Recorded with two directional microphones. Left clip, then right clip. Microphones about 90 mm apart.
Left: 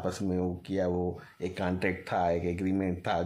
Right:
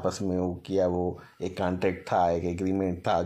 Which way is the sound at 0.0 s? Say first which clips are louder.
Right 3 dB; 35° right (ahead or behind).